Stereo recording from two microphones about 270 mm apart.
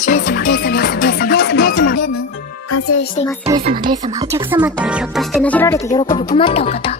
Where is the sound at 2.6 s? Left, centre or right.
Left.